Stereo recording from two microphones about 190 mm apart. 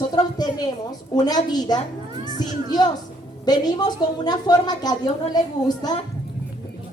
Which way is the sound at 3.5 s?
20° left (ahead or behind).